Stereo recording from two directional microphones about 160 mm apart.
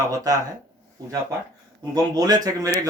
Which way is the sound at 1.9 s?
25° right (ahead or behind).